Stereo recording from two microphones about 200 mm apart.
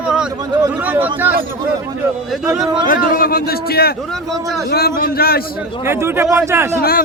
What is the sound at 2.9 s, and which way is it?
A man's voice, 45° left (ahead or behind).